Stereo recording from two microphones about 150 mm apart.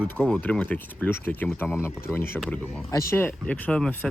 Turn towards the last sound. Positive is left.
turn(degrees=10)  # may be behind; listen again after turning